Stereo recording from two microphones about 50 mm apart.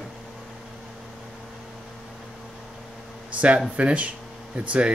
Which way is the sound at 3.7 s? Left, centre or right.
Right.